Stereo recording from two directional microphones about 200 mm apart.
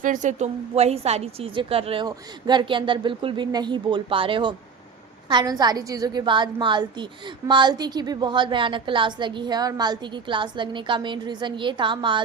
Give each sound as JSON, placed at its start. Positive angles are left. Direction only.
{"t": 0.0, "sound": "a woman's voice", "side_deg": -40}